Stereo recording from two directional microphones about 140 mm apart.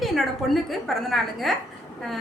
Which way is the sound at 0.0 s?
Centre (ahead or behind).